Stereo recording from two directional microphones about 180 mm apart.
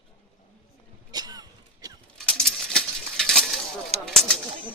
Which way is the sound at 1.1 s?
20° right (ahead or behind).